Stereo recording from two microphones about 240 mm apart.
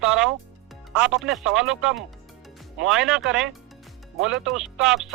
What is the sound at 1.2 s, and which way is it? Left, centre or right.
Speech, centre.